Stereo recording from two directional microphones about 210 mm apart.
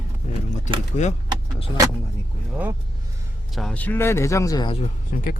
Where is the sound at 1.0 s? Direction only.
35° left (ahead or behind).